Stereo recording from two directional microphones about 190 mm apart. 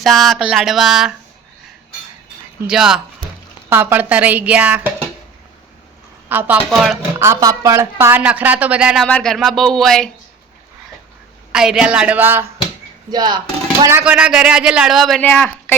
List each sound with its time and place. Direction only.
0.0 s speech: centre (ahead or behind)
2.6 s speech: 5° right (ahead or behind)
6.2 s a woman's voice: 10° right (ahead or behind)
7.2 s speech: 15° right (ahead or behind); by 10.1 s centre (ahead or behind)
11.5 s speech: 5° right (ahead or behind)
13.1 s speech: 20° right (ahead or behind)
13.8 s speech: 10° right (ahead or behind); by 15.7 s 10° left (ahead or behind)